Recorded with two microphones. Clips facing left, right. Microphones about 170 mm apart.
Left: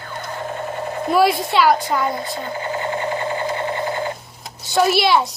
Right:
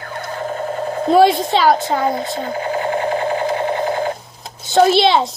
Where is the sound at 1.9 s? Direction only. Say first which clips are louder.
Right 3 dB; 45° right (ahead or behind).